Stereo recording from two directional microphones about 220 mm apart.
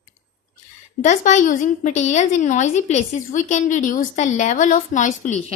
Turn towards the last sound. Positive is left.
turn(degrees=35)  # may be behind; listen again after turning